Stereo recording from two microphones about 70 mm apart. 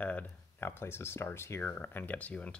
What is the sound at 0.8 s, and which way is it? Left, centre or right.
Speech, left.